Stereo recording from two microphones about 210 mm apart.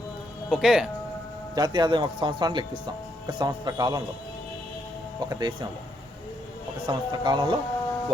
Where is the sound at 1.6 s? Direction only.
20° right (ahead or behind).